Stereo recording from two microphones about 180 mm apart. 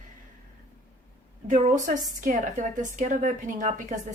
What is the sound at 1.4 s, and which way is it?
A woman's voice, 45° right (ahead or behind).